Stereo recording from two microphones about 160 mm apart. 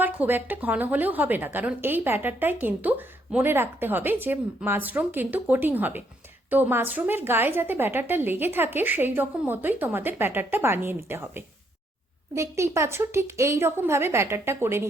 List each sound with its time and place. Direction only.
0.0 s a woman's voice: 10° right (ahead or behind)